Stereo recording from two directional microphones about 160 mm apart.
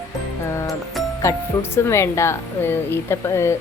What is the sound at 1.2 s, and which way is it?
Speech, 15° left (ahead or behind).